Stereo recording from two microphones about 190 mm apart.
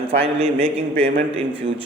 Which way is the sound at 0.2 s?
30° right (ahead or behind).